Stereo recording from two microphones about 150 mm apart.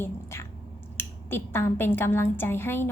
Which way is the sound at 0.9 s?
15° left (ahead or behind).